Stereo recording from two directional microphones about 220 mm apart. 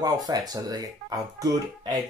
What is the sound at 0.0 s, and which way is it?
Speech, 15° right (ahead or behind).